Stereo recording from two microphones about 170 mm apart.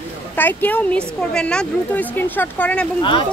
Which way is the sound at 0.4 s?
10° left (ahead or behind).